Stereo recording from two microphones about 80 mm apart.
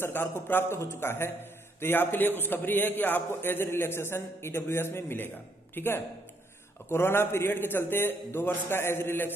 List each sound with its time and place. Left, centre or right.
0.0 s a man's voice: left